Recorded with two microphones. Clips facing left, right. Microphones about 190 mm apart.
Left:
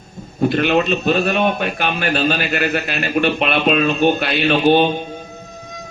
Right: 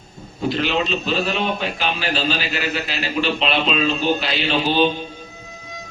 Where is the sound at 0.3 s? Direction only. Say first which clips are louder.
Left 5 dB; 55° left (ahead or behind).